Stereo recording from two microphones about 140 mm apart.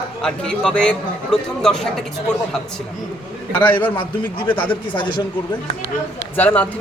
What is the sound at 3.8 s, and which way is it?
A man's voice, 35° left (ahead or behind).